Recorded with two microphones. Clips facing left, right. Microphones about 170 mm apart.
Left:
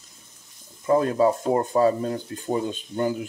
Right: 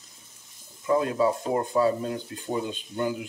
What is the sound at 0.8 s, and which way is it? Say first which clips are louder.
Speech: left 4 dB; 40° left (ahead or behind).